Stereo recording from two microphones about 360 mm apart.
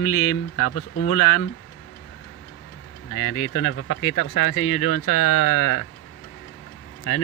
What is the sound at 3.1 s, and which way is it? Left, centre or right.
Speech, left.